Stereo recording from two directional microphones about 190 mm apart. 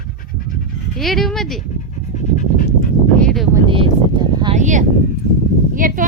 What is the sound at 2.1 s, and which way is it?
Pant, 40° left (ahead or behind).